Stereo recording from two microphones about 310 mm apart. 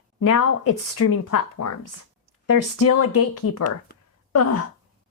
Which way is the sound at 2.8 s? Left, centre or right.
Left.